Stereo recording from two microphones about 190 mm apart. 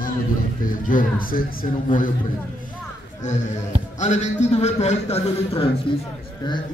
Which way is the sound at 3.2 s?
40° left (ahead or behind).